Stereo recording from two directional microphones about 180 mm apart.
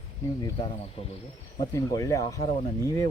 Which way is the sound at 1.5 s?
20° left (ahead or behind).